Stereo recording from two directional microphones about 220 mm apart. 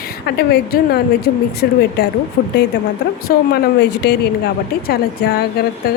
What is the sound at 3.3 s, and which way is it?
A woman's voice, 40° left (ahead or behind).